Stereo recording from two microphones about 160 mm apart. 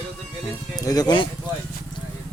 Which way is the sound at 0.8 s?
25° left (ahead or behind).